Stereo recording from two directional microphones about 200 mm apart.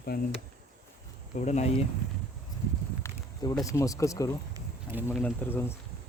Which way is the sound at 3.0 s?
15° left (ahead or behind).